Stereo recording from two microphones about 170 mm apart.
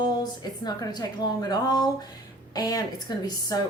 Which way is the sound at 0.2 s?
25° left (ahead or behind).